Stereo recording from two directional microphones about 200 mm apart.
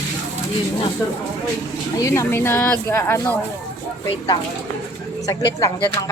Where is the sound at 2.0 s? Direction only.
15° left (ahead or behind).